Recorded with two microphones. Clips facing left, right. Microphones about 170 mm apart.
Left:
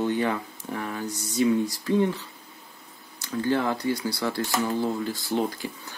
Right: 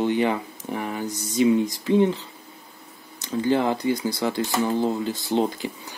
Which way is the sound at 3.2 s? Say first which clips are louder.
Right 3 dB; 20° right (ahead or behind).